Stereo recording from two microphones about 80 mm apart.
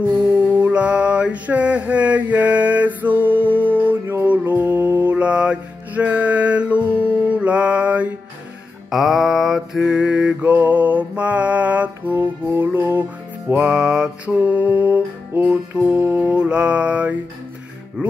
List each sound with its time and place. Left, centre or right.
0.0 s mantra: centre
7.0 s music: centre
8.9 s mantra: centre; by 13.0 s right
13.6 s music: centre
14.3 s mantra: centre